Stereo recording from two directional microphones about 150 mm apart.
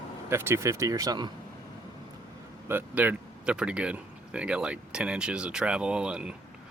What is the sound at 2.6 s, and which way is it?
Speech, 15° right (ahead or behind).